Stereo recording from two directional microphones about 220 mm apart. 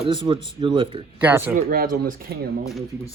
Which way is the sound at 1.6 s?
40° right (ahead or behind).